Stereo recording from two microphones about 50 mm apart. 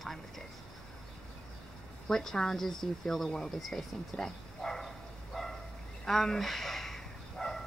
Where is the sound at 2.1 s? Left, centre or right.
Centre.